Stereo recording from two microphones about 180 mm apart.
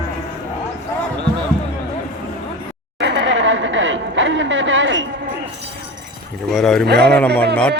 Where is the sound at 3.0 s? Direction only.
75° right (ahead or behind); by 5.0 s 90° right.